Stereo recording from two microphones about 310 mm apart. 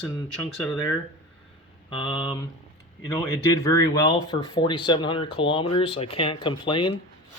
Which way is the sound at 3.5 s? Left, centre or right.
Centre.